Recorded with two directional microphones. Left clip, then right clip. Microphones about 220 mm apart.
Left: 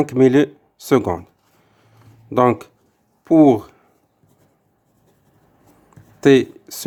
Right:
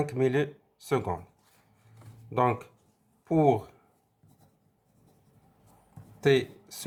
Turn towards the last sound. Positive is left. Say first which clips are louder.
# left 12 dB
turn(degrees=40)  # may be behind; listen again after turning